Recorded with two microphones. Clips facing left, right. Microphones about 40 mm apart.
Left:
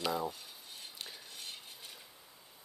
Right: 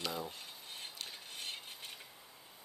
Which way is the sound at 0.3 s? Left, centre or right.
Right.